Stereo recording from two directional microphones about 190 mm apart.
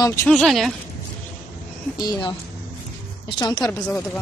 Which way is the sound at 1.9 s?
20° left (ahead or behind).